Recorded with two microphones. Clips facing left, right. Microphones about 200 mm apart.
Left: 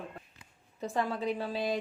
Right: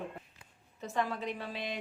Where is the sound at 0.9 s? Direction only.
35° left (ahead or behind).